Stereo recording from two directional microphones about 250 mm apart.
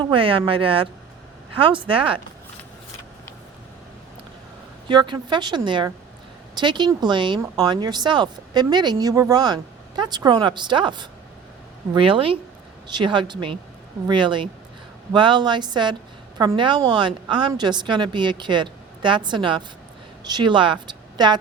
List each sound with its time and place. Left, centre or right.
0.0 s a woman's voice: right
4.9 s a woman's voice: centre